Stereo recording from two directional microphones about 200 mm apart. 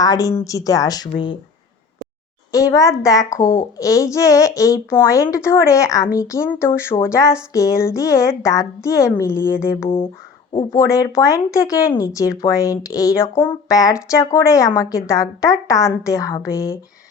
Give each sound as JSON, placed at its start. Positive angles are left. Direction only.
{"t": 0.0, "sound": "speech", "side_deg": 15}
{"t": 2.5, "sound": "speech", "side_deg": 15}
{"t": 10.5, "sound": "speech", "side_deg": 20}